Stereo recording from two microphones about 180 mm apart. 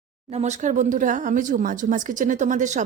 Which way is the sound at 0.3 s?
35° right (ahead or behind).